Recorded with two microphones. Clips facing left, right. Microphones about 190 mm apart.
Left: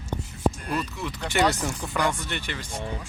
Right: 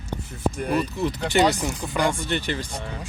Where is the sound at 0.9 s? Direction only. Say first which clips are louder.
Right 7 dB; 35° right (ahead or behind).